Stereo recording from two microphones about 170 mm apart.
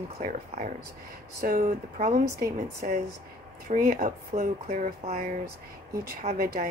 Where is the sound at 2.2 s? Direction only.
65° right (ahead or behind).